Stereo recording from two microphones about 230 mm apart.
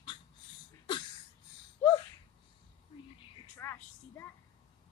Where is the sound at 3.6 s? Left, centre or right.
Centre.